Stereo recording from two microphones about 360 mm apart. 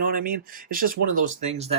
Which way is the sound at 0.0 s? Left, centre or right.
Right.